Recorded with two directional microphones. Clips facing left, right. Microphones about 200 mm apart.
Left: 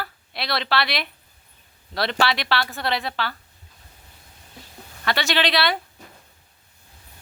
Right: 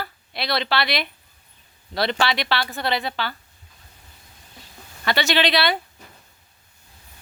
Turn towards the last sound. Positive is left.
turn(degrees=0)  # may be behind; listen again after turning